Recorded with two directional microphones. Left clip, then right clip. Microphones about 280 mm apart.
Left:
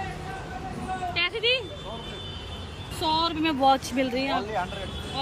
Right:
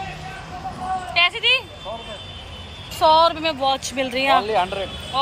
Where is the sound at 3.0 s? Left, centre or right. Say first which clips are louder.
Right 10 dB; centre.